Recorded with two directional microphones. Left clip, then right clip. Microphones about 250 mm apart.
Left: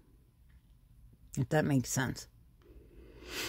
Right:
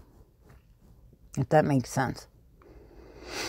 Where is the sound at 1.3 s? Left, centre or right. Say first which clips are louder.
Right 8 dB; centre.